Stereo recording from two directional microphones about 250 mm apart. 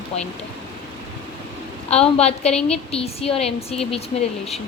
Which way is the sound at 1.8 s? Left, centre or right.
Left.